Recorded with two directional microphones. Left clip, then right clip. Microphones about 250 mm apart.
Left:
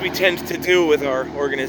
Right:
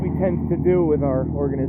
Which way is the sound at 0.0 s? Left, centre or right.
Left.